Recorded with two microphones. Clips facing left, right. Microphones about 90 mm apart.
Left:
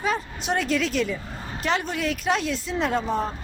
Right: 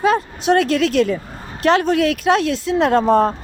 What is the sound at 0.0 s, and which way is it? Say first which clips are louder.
Speech: right 10 dB; 75° right (ahead or behind).